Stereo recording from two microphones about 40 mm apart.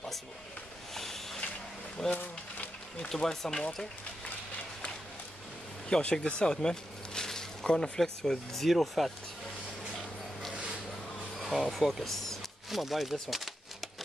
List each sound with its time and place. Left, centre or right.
0.9 s a sound: centre
2.0 s speech: centre
5.9 s speech: left; by 9.1 s centre
11.3 s speech: centre